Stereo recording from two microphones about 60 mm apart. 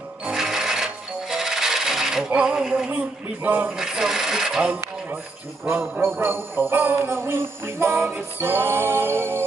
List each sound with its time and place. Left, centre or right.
0.2 s filing: centre
5.7 s jingle bell: right